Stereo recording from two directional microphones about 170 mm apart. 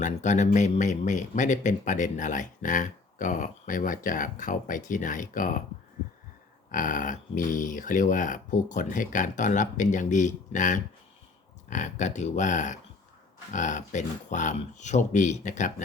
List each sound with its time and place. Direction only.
0.0 s speech: 45° left (ahead or behind)
6.7 s speech: 50° left (ahead or behind)